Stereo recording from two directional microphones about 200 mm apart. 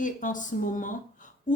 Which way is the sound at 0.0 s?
40° left (ahead or behind).